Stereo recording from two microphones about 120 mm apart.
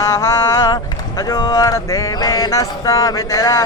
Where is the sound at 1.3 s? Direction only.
25° left (ahead or behind).